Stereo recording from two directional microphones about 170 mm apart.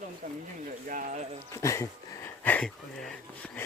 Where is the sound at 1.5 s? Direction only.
15° left (ahead or behind).